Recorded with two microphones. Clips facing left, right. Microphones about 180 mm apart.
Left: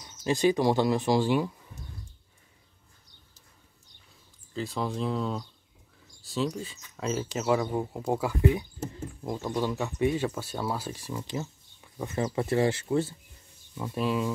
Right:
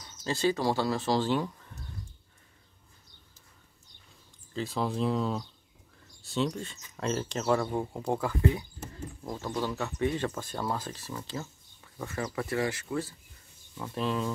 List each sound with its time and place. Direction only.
0.0 s speech: 15° left (ahead or behind)
4.6 s speech: centre (ahead or behind); by 13.1 s 25° left (ahead or behind)
13.7 s speech: 10° left (ahead or behind)